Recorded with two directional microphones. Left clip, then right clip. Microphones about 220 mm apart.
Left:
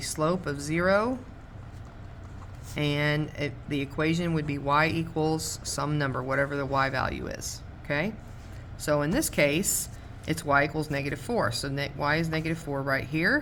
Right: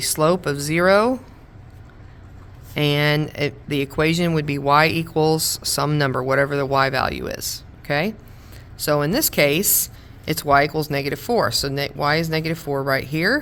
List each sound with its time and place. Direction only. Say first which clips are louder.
0.0 s speech: right 9 dB; 55° right (ahead or behind)
2.7 s speech: right 8 dB; 50° right (ahead or behind)